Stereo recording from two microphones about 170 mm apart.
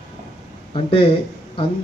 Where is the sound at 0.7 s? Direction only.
35° left (ahead or behind).